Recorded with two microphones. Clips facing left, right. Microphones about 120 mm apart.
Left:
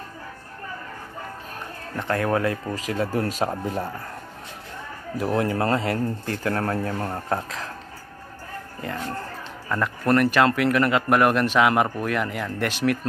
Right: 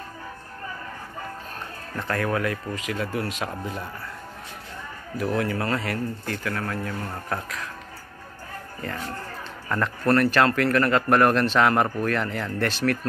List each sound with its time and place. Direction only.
2.0 s speech: 20° left (ahead or behind); by 3.9 s 40° left (ahead or behind)
5.1 s speech: 25° left (ahead or behind)
10.3 s a man's voice: 10° left (ahead or behind)